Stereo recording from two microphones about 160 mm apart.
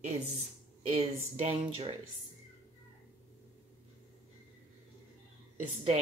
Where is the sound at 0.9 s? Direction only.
35° right (ahead or behind).